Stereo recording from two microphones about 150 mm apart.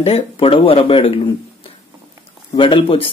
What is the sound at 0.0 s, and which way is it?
Speech, 40° left (ahead or behind).